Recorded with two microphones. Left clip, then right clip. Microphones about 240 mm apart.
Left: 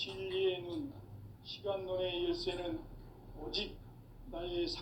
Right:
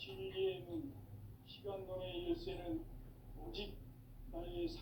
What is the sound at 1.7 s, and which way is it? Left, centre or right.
Speech, left.